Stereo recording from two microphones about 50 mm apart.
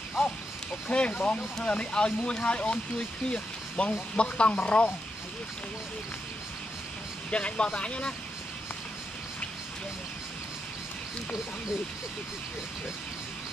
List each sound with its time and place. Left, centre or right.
0.2 s a sound: centre
0.8 s speech: left
7.2 s speech: left